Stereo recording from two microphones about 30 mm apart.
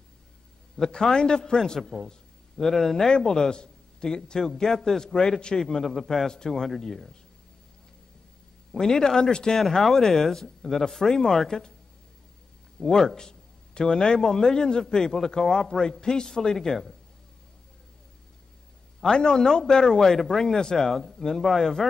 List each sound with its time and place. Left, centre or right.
0.7 s a man's voice: left
3.1 s a man's voice: left
5.6 s speech: centre
6.2 s a man's voice: left
8.7 s a man's voice: left
9.6 s speech: centre
12.8 s a man's voice: centre
16.5 s speech: centre
19.0 s a man's voice: left